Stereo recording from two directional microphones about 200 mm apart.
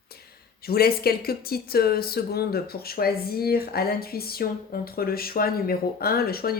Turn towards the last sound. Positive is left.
turn(degrees=50)  # may be behind; listen again after turning